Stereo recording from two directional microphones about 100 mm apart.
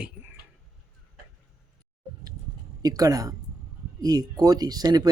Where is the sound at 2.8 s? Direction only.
40° right (ahead or behind).